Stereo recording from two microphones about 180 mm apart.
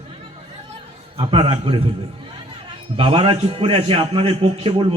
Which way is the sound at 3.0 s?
30° right (ahead or behind).